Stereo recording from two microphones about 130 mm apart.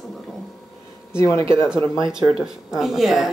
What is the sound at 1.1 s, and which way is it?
Speech, 20° left (ahead or behind).